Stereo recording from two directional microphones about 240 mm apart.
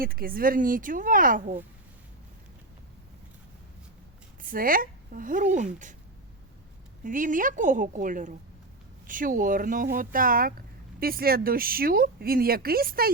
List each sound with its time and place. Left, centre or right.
0.0 s speech: right
4.4 s speech: right
7.0 s speech: right